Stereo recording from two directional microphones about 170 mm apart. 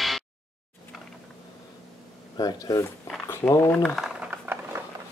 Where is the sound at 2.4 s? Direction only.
20° left (ahead or behind); by 4.8 s 10° right (ahead or behind).